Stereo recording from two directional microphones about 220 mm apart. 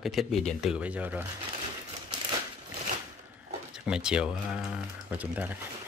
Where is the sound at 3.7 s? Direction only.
5° right (ahead or behind).